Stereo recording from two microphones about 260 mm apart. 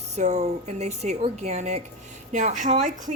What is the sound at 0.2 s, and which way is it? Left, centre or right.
Speech, right.